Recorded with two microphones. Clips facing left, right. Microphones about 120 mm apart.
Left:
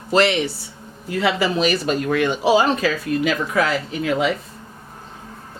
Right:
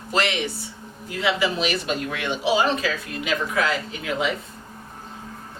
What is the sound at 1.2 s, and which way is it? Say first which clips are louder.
Speech: left 4 dB; 40° left (ahead or behind).